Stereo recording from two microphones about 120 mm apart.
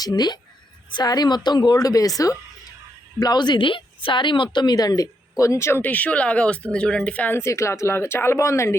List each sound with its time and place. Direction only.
0.0 s a woman's voice: 35° left (ahead or behind)